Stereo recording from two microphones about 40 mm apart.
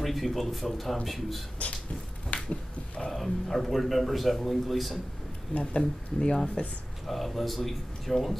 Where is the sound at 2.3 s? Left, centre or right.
Left.